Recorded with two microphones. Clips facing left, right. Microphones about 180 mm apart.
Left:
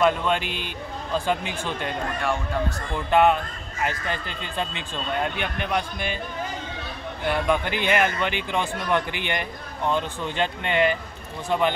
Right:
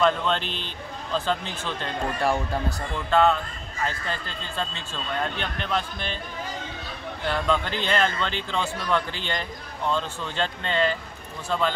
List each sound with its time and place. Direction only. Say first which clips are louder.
0.0 s a man's voice: left 1 dB; 10° left (ahead or behind)
3.1 s a man's voice: left 2 dB; 15° left (ahead or behind)
7.2 s a man's voice: left 2 dB; 15° left (ahead or behind)